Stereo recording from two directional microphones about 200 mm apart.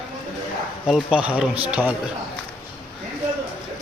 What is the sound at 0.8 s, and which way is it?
Speech, 5° right (ahead or behind).